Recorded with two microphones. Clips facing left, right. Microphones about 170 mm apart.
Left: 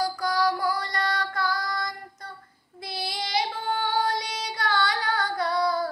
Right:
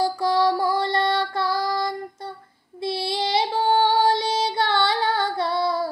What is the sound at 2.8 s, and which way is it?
Female singing, 25° right (ahead or behind).